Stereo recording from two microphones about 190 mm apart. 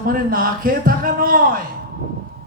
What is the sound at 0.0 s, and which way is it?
Speech, 50° right (ahead or behind).